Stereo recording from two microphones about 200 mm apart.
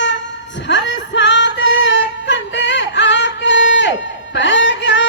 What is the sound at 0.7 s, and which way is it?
Music, 65° left (ahead or behind).